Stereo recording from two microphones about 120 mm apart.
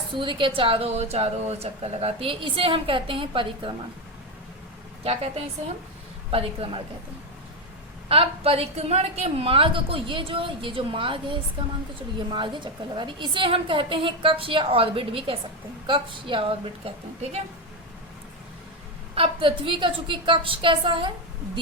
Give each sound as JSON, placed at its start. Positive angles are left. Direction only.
{"t": 0.2, "sound": "speech", "side_deg": -45}
{"t": 5.0, "sound": "a woman's voice", "side_deg": -60}
{"t": 8.0, "sound": "speech", "side_deg": -50}
{"t": 19.1, "sound": "speech", "side_deg": -45}